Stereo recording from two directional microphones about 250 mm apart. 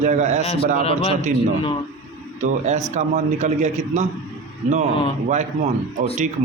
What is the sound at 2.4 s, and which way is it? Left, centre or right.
A man's voice, right.